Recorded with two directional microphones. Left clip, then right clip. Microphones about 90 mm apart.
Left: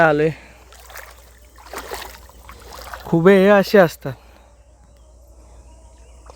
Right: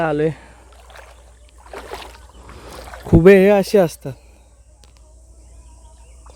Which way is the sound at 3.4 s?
60° right (ahead or behind).